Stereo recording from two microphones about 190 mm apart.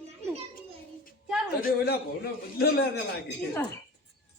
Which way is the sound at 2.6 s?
55° left (ahead or behind).